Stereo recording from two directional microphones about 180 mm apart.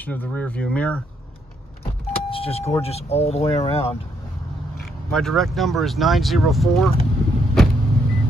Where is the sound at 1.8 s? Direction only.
30° left (ahead or behind).